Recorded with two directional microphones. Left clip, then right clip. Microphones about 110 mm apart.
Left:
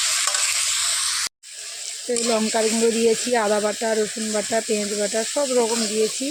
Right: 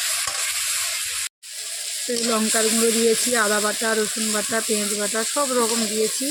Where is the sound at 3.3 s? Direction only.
10° left (ahead or behind).